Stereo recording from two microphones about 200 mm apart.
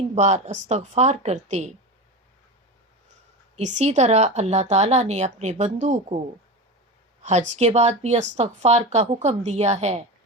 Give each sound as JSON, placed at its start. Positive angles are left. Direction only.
{"t": 0.1, "sound": "a woman's voice", "side_deg": -35}
{"t": 3.5, "sound": "a woman's voice", "side_deg": -35}
{"t": 7.2, "sound": "a woman's voice", "side_deg": -35}